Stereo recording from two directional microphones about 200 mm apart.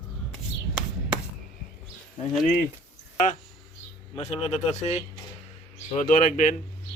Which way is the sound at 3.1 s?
40° left (ahead or behind).